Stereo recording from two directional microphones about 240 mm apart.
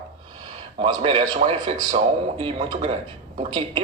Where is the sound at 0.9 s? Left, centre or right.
Right.